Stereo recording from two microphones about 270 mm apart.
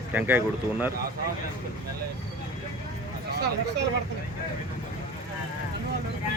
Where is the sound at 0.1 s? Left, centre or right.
Centre.